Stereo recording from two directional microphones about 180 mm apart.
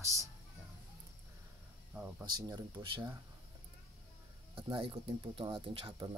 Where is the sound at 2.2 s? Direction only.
25° right (ahead or behind).